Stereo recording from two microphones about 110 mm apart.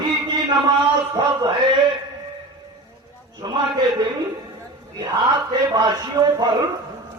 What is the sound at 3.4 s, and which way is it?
Speech, 40° right (ahead or behind).